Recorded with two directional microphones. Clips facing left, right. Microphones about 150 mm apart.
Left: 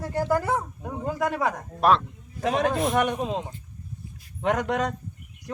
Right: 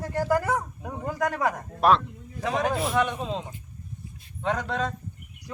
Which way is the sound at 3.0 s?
55° left (ahead or behind).